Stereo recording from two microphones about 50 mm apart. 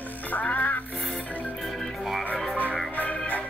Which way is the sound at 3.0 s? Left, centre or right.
Left.